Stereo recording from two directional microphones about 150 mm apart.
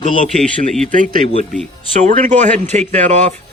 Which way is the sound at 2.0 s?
55° right (ahead or behind).